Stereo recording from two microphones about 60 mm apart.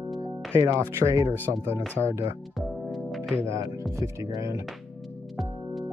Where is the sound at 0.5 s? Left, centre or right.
Right.